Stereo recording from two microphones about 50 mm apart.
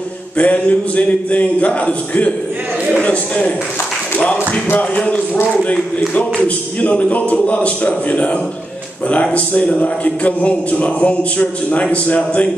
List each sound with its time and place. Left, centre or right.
0.4 s a man's voice: left
4.2 s a sound: left
4.6 s music: left
6.1 s speech: left